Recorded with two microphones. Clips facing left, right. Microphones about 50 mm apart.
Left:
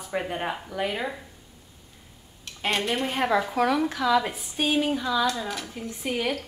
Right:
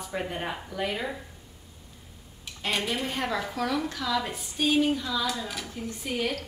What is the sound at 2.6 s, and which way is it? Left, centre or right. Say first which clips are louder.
Speech: left 3 dB; centre.